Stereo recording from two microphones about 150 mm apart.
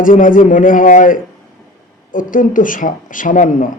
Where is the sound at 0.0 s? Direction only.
65° left (ahead or behind).